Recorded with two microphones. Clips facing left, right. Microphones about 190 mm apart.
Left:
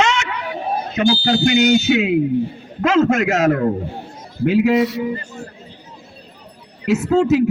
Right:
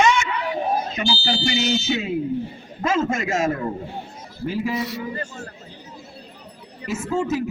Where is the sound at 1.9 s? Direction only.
75° left (ahead or behind).